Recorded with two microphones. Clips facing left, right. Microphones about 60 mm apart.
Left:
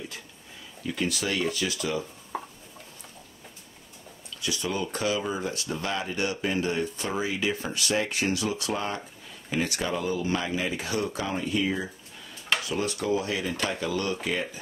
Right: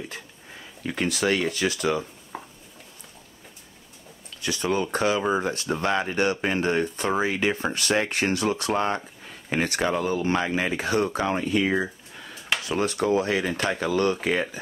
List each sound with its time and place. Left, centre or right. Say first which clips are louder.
0.8 s speech: right 5 dB; right
2.3 s a sound: left 3 dB; centre
4.4 s speech: right 5 dB; right